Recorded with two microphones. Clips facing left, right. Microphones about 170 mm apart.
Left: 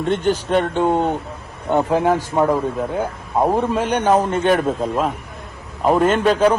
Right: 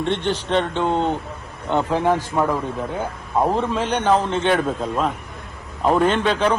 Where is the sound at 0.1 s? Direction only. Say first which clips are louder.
Left 5 dB; 10° left (ahead or behind).